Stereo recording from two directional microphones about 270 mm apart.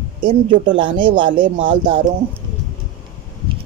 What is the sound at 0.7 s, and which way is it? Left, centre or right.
Speech, centre.